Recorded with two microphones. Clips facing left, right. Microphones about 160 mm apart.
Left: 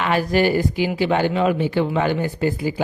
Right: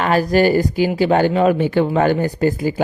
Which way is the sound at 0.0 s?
40° right (ahead or behind).